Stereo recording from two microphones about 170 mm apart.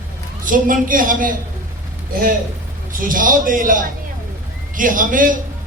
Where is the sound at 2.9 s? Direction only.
55° right (ahead or behind).